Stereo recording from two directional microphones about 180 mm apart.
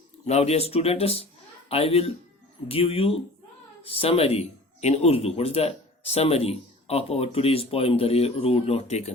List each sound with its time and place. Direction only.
0.3 s speech: 35° left (ahead or behind)